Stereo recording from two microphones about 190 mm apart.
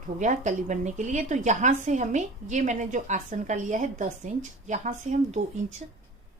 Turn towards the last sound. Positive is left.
turn(degrees=-40)  # may be behind; listen again after turning